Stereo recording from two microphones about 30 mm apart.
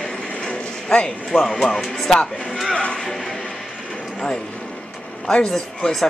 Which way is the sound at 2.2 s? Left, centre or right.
Left.